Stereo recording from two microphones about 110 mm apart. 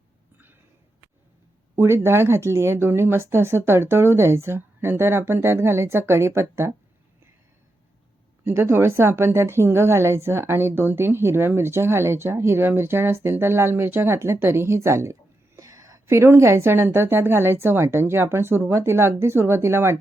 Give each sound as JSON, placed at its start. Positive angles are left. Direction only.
{"t": 1.7, "sound": "speech", "side_deg": -25}
{"t": 8.4, "sound": "speech", "side_deg": -25}